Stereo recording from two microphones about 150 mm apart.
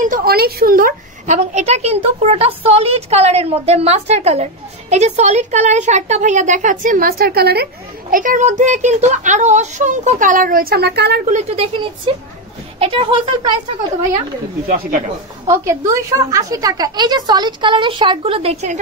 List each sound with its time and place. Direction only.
0.0 s a woman's voice: 75° right (ahead or behind)
8.1 s a child's voice: 60° right (ahead or behind); by 11.3 s 90° right
11.3 s a woman's voice: 45° right (ahead or behind)
12.7 s speech: 40° right (ahead or behind)
14.7 s speech: 70° right (ahead or behind)
15.4 s a woman's voice: 20° right (ahead or behind); by 18.8 s 45° right (ahead or behind)